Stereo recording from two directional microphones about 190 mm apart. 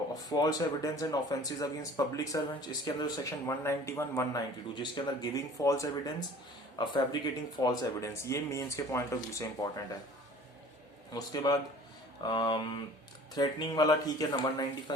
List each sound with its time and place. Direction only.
0.3 s speech: 20° left (ahead or behind)
4.7 s speech: 25° left (ahead or behind)
11.1 s speech: 20° left (ahead or behind)